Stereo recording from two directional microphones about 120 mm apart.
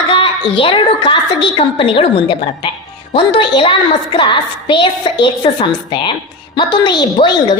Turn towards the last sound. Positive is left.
turn(degrees=40)  # may be behind; listen again after turning